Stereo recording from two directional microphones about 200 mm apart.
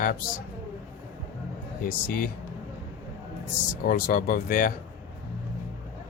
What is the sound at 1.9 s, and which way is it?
Speech, 45° left (ahead or behind).